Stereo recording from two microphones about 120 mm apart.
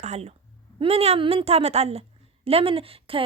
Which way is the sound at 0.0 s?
65° right (ahead or behind).